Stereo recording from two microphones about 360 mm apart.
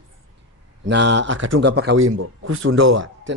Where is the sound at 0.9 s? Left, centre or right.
Right.